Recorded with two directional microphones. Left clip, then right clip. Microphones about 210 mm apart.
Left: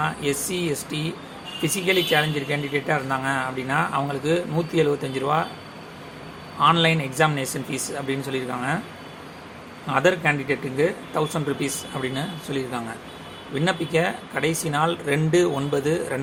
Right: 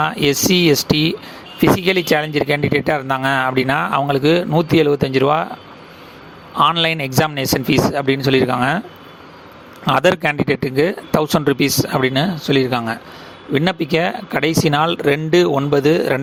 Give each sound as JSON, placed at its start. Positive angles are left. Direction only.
{"t": 0.0, "sound": "speech", "side_deg": -45}
{"t": 6.6, "sound": "speech", "side_deg": -50}
{"t": 9.8, "sound": "speech", "side_deg": -55}